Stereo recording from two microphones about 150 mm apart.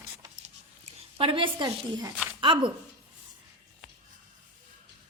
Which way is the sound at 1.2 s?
35° right (ahead or behind).